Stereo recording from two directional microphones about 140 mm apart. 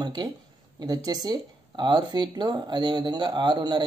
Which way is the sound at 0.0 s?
30° right (ahead or behind).